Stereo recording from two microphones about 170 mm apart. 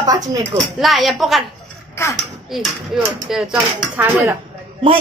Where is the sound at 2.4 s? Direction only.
Centre (ahead or behind).